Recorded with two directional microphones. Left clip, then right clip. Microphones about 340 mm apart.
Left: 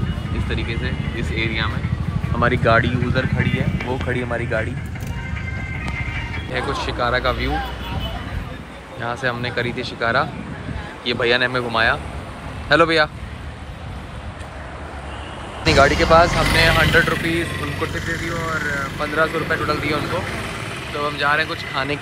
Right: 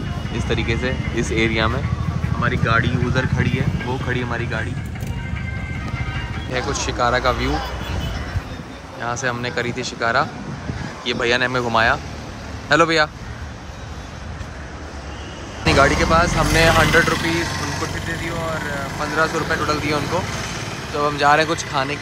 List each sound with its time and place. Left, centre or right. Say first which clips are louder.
0.5 s speech: right 5 dB; centre
2.4 s speech: left 3 dB; centre
6.5 s speech: even; centre
9.0 s speech: even; centre
15.6 s speech: left 1 dB; centre
21.0 s speech: right 4 dB; centre